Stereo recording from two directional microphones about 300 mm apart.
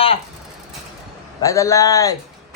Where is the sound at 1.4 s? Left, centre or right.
Centre.